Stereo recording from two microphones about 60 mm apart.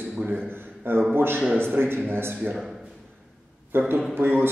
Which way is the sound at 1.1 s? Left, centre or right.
Right.